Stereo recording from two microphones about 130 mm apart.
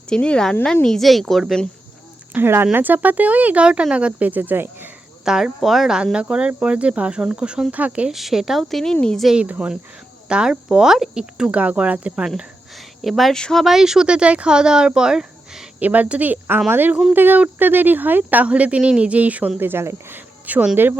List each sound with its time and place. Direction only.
0.1 s speech: 5° left (ahead or behind)
2.3 s speech: 15° right (ahead or behind)
5.2 s speech: 5° right (ahead or behind)